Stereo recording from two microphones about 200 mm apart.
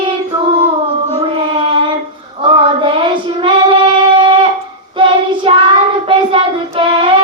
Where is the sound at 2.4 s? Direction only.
25° right (ahead or behind).